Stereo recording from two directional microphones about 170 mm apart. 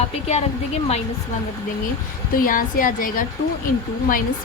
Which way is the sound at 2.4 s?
55° left (ahead or behind).